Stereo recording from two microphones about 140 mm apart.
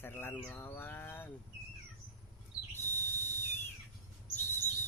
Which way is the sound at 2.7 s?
15° left (ahead or behind).